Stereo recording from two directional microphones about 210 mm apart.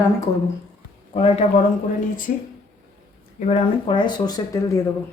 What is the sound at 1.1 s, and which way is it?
Speech, 30° left (ahead or behind).